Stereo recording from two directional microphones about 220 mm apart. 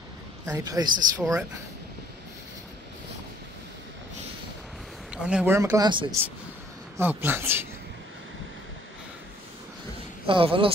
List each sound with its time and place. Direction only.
0.5 s speech: 15° right (ahead or behind)
5.1 s speech: 5° right (ahead or behind)
10.2 s speech: 25° right (ahead or behind)